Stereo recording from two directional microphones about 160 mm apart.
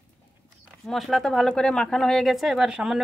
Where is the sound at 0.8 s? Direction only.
Centre (ahead or behind).